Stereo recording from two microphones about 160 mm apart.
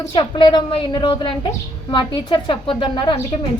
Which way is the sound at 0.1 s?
30° left (ahead or behind).